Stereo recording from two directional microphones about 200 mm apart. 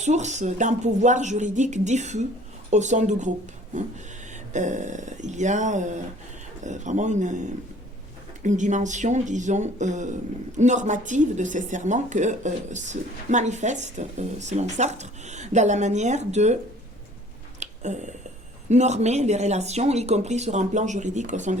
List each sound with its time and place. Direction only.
0.0 s speech: 35° right (ahead or behind)
4.5 s speech: 35° right (ahead or behind)
17.6 s a sound: 35° right (ahead or behind)
18.7 s speech: 35° right (ahead or behind)